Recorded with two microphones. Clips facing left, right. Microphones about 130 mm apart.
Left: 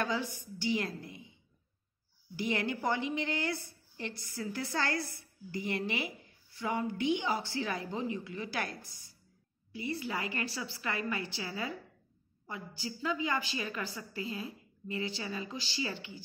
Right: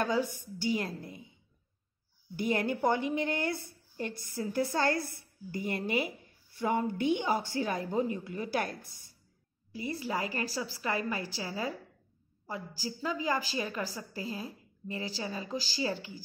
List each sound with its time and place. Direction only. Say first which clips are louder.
0.0 s a woman's voice: right 4 dB; 45° right (ahead or behind)
2.3 s a woman's voice: right 3 dB; 50° right (ahead or behind)
9.8 s a woman's voice: right 2 dB; 40° right (ahead or behind)